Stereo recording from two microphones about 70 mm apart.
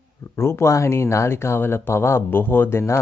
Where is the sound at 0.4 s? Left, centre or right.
Left.